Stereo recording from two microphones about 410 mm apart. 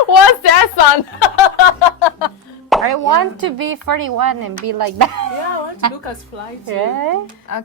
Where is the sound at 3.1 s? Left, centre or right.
Right.